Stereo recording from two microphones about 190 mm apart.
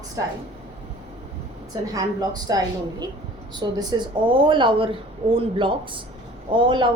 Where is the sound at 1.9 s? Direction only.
20° right (ahead or behind).